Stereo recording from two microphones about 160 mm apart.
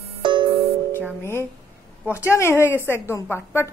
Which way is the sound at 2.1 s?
15° left (ahead or behind).